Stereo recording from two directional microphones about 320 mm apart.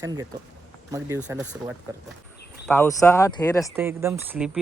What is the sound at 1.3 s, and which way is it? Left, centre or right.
Speech, centre.